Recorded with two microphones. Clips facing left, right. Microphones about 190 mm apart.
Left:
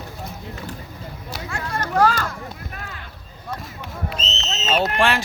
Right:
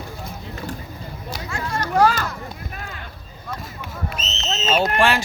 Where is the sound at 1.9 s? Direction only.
10° right (ahead or behind).